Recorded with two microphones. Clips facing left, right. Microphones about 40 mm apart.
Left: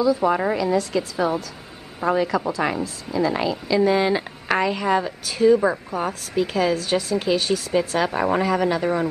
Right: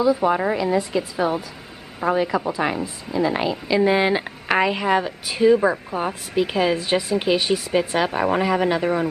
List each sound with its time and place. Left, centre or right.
0.0 s a woman's voice: right
8.0 s speech: centre